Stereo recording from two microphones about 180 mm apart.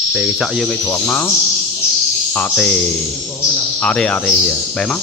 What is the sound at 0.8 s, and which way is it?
Speech, 10° left (ahead or behind).